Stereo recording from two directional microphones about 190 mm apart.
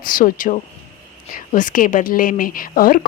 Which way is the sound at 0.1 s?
45° left (ahead or behind).